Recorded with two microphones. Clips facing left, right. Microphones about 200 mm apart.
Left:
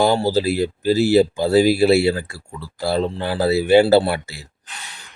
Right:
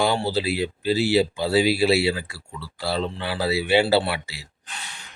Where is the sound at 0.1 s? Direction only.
40° left (ahead or behind).